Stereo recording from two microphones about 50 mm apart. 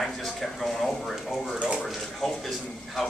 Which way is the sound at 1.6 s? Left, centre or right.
Centre.